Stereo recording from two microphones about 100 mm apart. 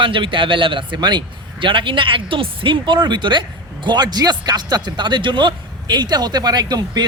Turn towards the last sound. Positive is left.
turn(degrees=-45)  # may be behind; listen again after turning